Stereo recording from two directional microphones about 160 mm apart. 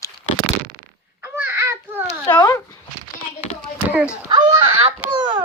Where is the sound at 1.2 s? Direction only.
10° right (ahead or behind).